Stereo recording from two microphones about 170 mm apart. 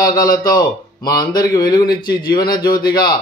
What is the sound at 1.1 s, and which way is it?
Speech, 60° left (ahead or behind).